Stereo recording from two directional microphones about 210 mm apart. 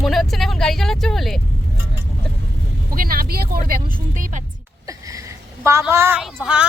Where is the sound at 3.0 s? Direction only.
45° right (ahead or behind).